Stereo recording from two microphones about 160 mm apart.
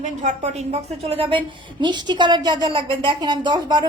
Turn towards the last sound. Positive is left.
turn(degrees=-25)  # may be behind; listen again after turning